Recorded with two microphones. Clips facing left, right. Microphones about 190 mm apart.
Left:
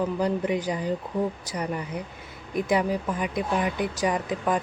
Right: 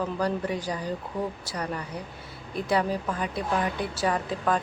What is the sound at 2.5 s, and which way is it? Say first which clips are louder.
Mantra: left 2 dB; 15° left (ahead or behind).